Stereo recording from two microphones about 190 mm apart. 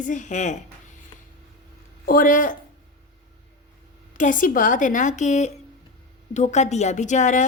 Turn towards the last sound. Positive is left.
turn(degrees=40)  # may be behind; listen again after turning